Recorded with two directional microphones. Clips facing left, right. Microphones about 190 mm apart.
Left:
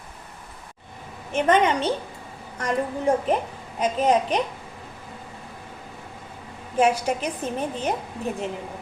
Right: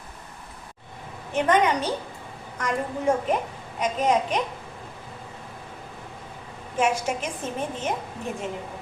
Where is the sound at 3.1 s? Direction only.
35° left (ahead or behind).